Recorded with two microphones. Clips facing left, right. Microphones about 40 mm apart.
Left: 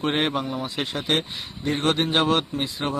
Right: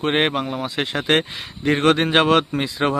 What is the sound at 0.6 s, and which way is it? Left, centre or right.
Speech, right.